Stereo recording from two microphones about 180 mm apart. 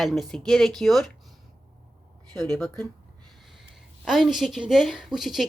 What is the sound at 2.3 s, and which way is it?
Speech, 20° right (ahead or behind).